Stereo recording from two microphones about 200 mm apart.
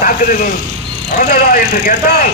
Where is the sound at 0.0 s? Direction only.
40° left (ahead or behind).